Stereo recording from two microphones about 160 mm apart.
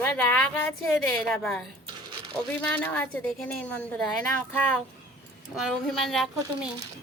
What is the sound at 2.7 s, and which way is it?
A woman's voice, 10° left (ahead or behind).